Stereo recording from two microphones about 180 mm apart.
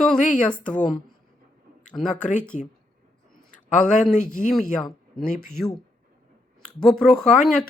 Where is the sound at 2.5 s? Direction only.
40° left (ahead or behind).